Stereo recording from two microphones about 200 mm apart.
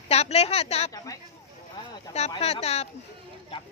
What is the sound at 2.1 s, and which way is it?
Speech, 30° left (ahead or behind).